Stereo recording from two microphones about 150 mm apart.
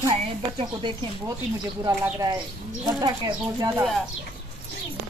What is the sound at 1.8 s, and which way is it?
Speech, 25° right (ahead or behind).